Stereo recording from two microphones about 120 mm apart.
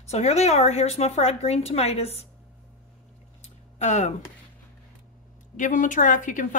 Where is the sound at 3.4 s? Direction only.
85° left.